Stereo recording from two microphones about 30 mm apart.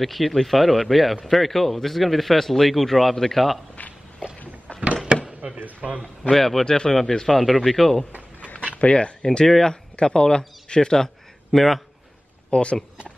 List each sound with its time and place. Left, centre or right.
0.0 s speech: centre
4.7 s a sound: left
5.1 s a sound: right
5.8 s a man's voice: centre
6.3 s speech: centre
6.6 s speech: left
8.7 s speech: left
9.2 s speech: left
9.9 s speech: left
11.5 s speech: centre
12.4 s speech: left